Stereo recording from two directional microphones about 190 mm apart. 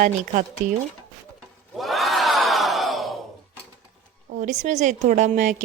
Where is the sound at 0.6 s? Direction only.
40° right (ahead or behind).